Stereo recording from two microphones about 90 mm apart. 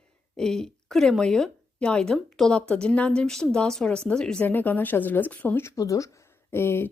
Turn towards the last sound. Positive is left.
turn(degrees=25)  # may be behind; listen again after turning